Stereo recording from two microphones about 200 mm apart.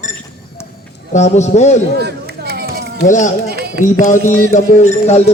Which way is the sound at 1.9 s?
55° right (ahead or behind).